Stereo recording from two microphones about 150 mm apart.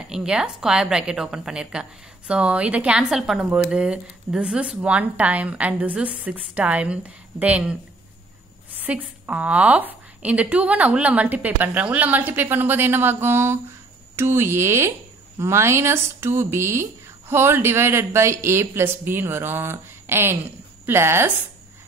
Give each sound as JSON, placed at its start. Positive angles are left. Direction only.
{"t": 0.0, "sound": "a woman's voice", "side_deg": -5}
{"t": 8.8, "sound": "a woman's voice", "side_deg": -10}